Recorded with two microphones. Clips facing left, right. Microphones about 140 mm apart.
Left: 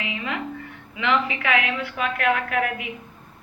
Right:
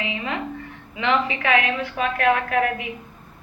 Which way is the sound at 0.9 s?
30° right (ahead or behind).